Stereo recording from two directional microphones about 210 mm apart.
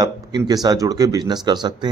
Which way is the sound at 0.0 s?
20° right (ahead or behind).